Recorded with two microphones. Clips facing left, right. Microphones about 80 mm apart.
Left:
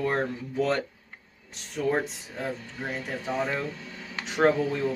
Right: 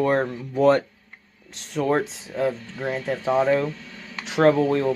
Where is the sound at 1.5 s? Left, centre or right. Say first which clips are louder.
Right 5 dB; right.